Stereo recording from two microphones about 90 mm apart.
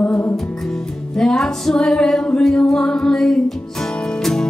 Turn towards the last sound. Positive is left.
turn(degrees=5)  # may be behind; listen again after turning